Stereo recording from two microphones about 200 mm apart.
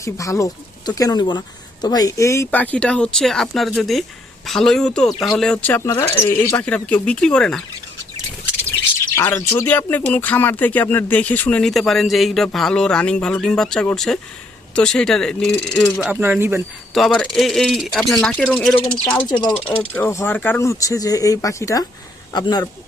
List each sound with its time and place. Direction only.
0.0 s speech: 15° left (ahead or behind)
9.1 s speech: 10° left (ahead or behind)
16.0 s speech: 10° right (ahead or behind)
16.9 s speech: centre (ahead or behind)
19.3 s speech: 20° left (ahead or behind)
19.9 s speech: 10° left (ahead or behind)